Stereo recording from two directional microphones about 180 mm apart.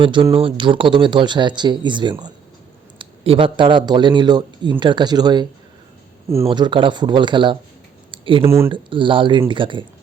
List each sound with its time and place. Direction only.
0.0 s speech: 25° right (ahead or behind)
6.5 s speech: 25° right (ahead or behind)
8.1 s a sound: 30° right (ahead or behind)
8.4 s speech: 15° right (ahead or behind)
8.7 s speech: 30° right (ahead or behind)